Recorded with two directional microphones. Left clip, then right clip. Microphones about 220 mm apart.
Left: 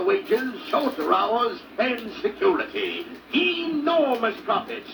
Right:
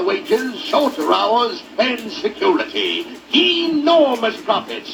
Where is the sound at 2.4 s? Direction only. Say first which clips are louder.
Right 5 dB; 50° right (ahead or behind).